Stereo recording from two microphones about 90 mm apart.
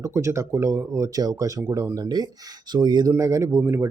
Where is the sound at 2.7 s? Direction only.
50° right (ahead or behind).